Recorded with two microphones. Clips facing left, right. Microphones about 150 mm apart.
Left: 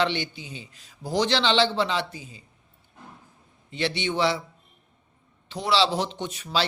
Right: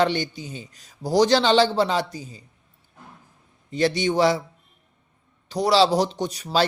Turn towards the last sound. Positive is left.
turn(degrees=-40)  # may be behind; listen again after turning